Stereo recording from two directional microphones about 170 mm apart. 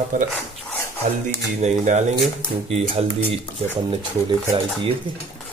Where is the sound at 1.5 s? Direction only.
45° right (ahead or behind).